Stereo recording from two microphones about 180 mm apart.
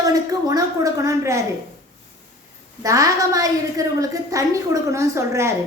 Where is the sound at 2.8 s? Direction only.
20° right (ahead or behind).